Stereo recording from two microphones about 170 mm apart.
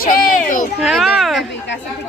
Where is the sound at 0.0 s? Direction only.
50° left (ahead or behind).